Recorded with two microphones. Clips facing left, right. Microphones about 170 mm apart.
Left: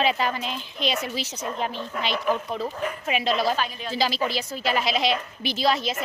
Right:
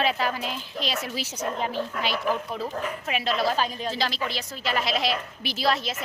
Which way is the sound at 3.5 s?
35° right (ahead or behind).